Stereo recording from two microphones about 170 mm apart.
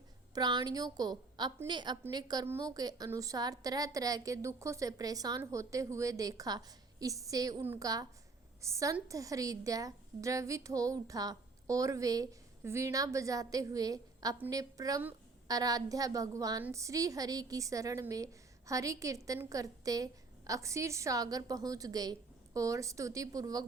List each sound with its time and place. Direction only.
0.3 s a woman's voice: 25° right (ahead or behind)